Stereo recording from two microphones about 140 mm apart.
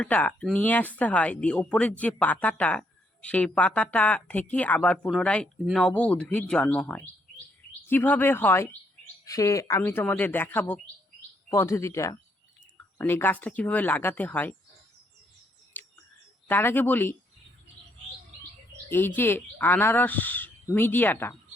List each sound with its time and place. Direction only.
0.0 s speech: 10° left (ahead or behind)
15.7 s a sound: 10° left (ahead or behind)
16.5 s speech: 15° left (ahead or behind)
18.9 s speech: 15° left (ahead or behind)